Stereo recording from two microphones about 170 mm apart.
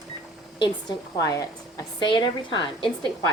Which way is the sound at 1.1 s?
20° left (ahead or behind).